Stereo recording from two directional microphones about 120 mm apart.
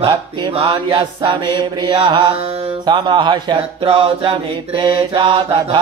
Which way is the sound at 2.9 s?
40° right (ahead or behind).